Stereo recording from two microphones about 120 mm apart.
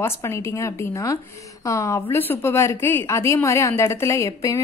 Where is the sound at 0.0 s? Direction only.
20° left (ahead or behind).